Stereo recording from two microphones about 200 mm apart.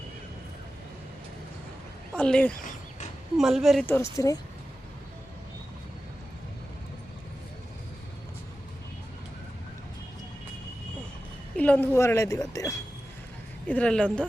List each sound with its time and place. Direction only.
2.1 s speech: 5° left (ahead or behind)
2.6 s a sound: 40° left (ahead or behind)
3.3 s speech: centre (ahead or behind)
3.8 s a woman's voice: 10° left (ahead or behind)
11.5 s a woman's voice: 5° left (ahead or behind)
13.7 s speech: 5° left (ahead or behind)